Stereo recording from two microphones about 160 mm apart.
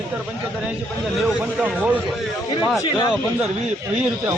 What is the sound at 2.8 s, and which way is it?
Speech, 25° left (ahead or behind).